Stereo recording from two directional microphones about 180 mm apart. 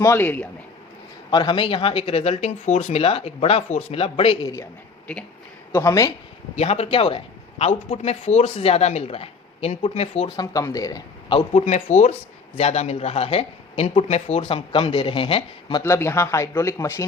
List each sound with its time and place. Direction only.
0.0 s speech: 10° left (ahead or behind)
1.3 s speech: 25° left (ahead or behind)
5.7 s speech: 20° left (ahead or behind)
6.6 s speech: 35° left (ahead or behind)
10.3 s speech: 20° left (ahead or behind)
11.5 s speech: 40° left (ahead or behind)
15.8 s speech: 15° left (ahead or behind)